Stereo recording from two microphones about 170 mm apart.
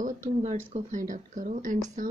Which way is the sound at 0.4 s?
40° right (ahead or behind).